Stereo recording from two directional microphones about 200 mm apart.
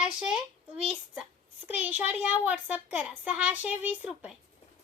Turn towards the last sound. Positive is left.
turn(degrees=-5)  # may be behind; listen again after turning